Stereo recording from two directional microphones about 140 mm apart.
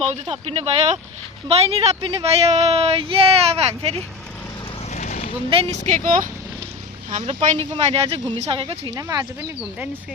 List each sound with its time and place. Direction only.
0.0 s speech: 45° right (ahead or behind)
4.9 s vehicle: 55° left (ahead or behind)
5.5 s speech: 40° right (ahead or behind)
5.8 s speech: 65° right (ahead or behind)
7.1 s speech: 55° right (ahead or behind)
9.0 s speech: 25° right (ahead or behind)
9.6 s speech: 10° right (ahead or behind)